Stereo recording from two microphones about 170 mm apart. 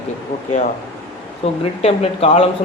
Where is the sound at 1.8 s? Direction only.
35° left (ahead or behind).